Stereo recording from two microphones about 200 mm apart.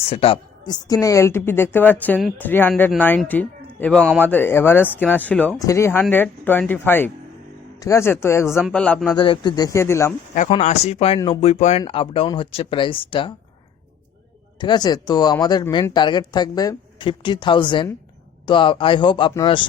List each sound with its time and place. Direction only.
0.1 s a woman's voice: 30° left (ahead or behind); by 8.5 s 15° left (ahead or behind)
8.5 s a man's voice: centre (ahead or behind)
9.1 s speech: 25° left (ahead or behind)
10.5 s speech: 35° left (ahead or behind)
14.6 s speech: 20° left (ahead or behind)